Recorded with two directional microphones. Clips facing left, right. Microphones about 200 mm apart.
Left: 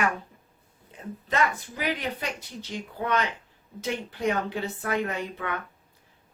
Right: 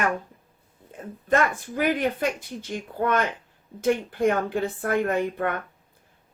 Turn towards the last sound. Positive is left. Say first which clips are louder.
# right 7 dB
turn(degrees=-50)  # may be behind; listen again after turning